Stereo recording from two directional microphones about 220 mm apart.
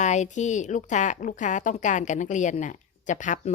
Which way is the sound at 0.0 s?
35° left (ahead or behind).